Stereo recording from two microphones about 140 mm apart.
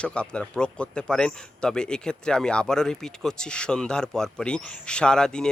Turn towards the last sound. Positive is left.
turn(degrees=5)  # may be behind; listen again after turning